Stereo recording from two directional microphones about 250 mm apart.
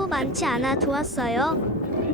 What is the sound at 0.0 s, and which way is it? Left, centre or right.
A woman's voice, centre.